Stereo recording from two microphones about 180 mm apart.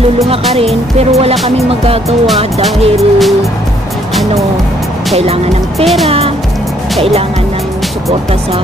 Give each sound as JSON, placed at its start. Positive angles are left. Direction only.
{"t": 0.9, "sound": "speech", "side_deg": -35}
{"t": 3.0, "sound": "music", "side_deg": 0}
{"t": 5.1, "sound": "speech", "side_deg": -35}